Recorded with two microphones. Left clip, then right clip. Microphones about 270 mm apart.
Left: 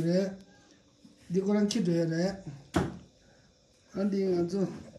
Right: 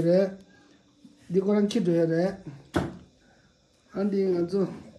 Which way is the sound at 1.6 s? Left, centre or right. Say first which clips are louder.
Right 5 dB; centre.